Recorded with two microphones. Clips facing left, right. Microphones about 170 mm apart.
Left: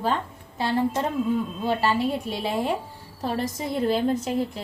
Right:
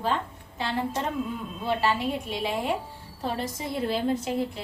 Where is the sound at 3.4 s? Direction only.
45° left (ahead or behind).